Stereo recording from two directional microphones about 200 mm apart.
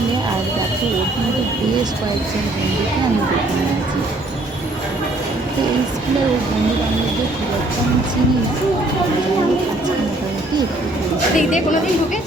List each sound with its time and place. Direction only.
11.3 s speech: 40° left (ahead or behind)